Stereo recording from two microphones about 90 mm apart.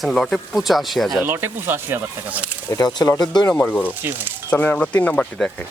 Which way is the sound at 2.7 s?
50° left (ahead or behind).